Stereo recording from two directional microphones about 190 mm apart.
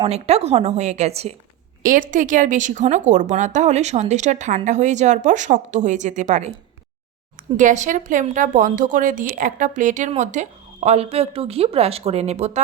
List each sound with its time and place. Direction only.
0.1 s a woman's voice: 35° right (ahead or behind)
1.8 s a woman's voice: 45° right (ahead or behind)
7.5 s a woman's voice: 40° right (ahead or behind)